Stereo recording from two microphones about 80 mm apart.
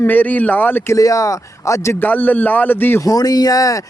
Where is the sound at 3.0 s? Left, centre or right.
Left.